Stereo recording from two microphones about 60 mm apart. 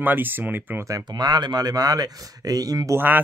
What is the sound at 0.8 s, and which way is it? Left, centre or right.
Speech, right.